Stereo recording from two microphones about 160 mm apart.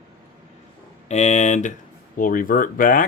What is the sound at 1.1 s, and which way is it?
Speech, 45° left (ahead or behind).